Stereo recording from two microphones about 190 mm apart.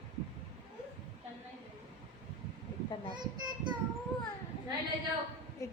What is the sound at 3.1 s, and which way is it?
Speech, 25° right (ahead or behind).